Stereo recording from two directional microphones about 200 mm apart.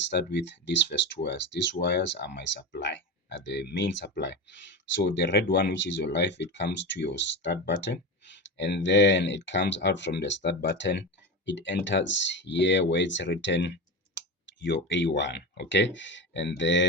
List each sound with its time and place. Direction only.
0.1 s speech: 55° left (ahead or behind)